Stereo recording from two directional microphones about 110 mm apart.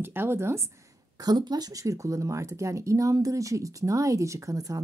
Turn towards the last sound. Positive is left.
turn(degrees=-30)  # may be behind; listen again after turning